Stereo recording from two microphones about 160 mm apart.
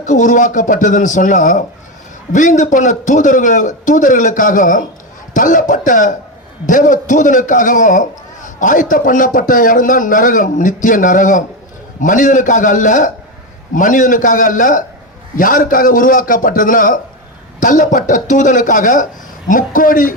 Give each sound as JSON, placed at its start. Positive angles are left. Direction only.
{"t": 0.0, "sound": "a man's voice", "side_deg": 50}